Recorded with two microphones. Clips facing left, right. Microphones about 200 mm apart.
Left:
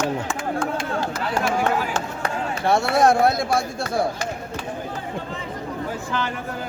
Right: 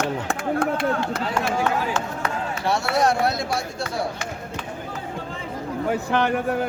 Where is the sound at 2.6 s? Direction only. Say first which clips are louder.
Left 4 dB; 50° left (ahead or behind).